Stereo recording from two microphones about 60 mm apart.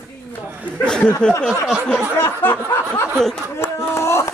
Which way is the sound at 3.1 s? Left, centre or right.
Centre.